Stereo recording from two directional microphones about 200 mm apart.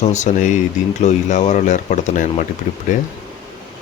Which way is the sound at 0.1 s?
35° left (ahead or behind).